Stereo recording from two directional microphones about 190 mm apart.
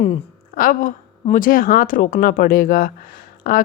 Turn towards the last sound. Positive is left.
turn(degrees=50)  # may be behind; listen again after turning